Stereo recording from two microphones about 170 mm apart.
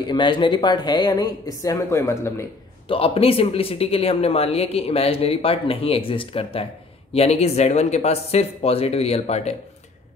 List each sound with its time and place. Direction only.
0.0 s speech: 25° left (ahead or behind)
2.9 s speech: 35° left (ahead or behind)